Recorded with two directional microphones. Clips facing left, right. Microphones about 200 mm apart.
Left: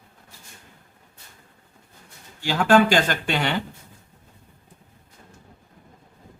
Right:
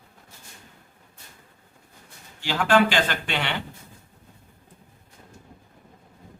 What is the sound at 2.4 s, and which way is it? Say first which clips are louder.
Speech: left 3 dB; 45° left (ahead or behind).